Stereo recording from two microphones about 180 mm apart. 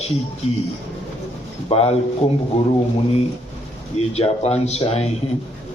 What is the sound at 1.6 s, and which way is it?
Speech, 35° left (ahead or behind).